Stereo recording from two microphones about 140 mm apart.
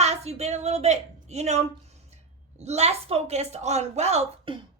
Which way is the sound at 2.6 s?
50° right (ahead or behind).